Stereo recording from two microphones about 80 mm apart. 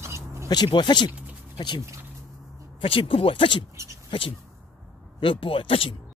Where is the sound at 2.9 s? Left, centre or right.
Left.